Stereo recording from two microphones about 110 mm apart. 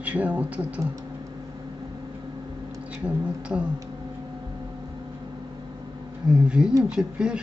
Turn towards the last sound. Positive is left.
turn(degrees=-10)  # may be behind; listen again after turning